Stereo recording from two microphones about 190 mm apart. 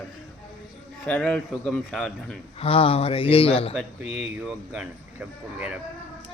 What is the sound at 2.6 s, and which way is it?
Speech, 30° left (ahead or behind).